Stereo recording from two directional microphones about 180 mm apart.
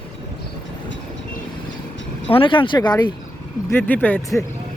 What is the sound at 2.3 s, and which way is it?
Speech, 30° left (ahead or behind).